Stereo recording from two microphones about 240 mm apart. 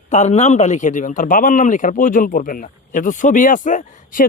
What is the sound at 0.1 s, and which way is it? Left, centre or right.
A man's voice, left.